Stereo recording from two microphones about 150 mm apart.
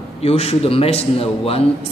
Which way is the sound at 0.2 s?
45° left (ahead or behind).